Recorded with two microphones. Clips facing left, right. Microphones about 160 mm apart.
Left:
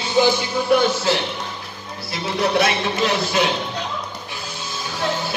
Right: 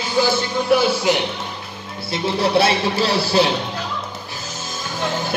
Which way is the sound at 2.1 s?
30° right (ahead or behind).